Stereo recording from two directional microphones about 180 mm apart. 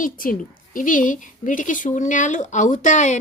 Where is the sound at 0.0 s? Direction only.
50° left (ahead or behind).